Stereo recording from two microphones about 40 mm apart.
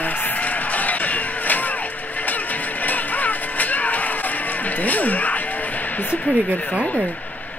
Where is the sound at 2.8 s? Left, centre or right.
Left.